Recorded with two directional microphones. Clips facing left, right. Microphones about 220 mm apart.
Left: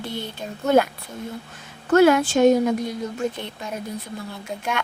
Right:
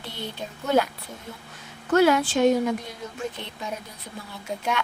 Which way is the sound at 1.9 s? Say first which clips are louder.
Left 4 dB; 50° left (ahead or behind).